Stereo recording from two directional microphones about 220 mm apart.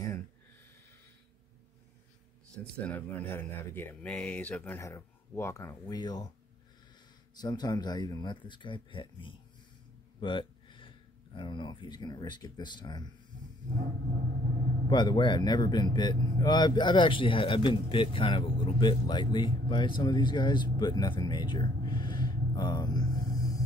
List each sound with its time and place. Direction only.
2.5 s speech: 5° left (ahead or behind)
7.3 s speech: 20° left (ahead or behind)
14.9 s speech: 20° left (ahead or behind)